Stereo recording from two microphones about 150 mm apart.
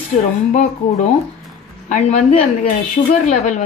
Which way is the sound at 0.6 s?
50° left (ahead or behind).